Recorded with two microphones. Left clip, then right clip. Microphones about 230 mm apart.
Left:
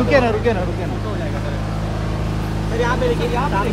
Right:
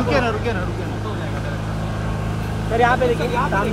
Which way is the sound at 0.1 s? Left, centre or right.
Left.